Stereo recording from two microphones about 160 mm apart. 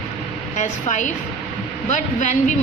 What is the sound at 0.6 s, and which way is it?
A woman's voice, 50° left (ahead or behind).